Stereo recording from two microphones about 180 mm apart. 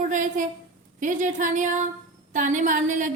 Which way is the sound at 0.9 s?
45° right (ahead or behind).